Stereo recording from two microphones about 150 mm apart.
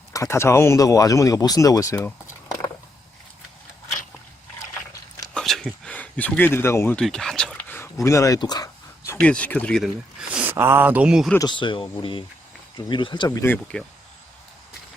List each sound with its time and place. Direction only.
0.1 s speech: 20° left (ahead or behind)
5.3 s a sound: centre (ahead or behind)
6.9 s a sound: 5° left (ahead or behind)
8.0 s speech: 20° left (ahead or behind)
9.2 s speech: 10° left (ahead or behind)
11.3 s speech: 30° left (ahead or behind); by 13.8 s 10° left (ahead or behind)